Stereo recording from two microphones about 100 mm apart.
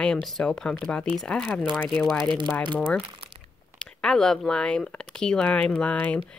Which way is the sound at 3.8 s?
5° left (ahead or behind).